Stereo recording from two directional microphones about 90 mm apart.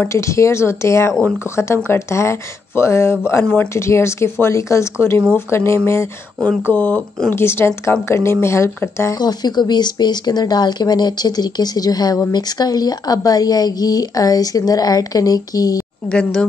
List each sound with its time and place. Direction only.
0.0 s speech: 30° left (ahead or behind)
6.7 s a woman's voice: 20° left (ahead or behind)
9.2 s speech: 50° left (ahead or behind)
16.1 s speech: 10° left (ahead or behind)